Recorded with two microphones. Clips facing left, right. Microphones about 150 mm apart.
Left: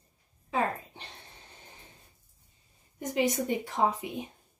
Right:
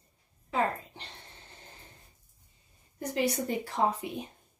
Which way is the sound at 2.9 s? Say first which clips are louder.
Left 2 dB; 20° left (ahead or behind).